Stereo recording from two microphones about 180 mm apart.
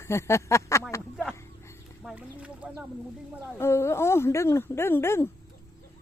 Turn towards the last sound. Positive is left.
turn(degrees=15)  # may be behind; listen again after turning